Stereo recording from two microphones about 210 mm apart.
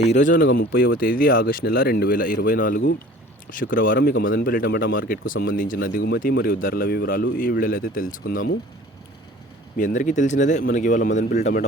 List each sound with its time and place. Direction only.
0.0 s speech: 35° left (ahead or behind)
9.7 s speech: 40° left (ahead or behind)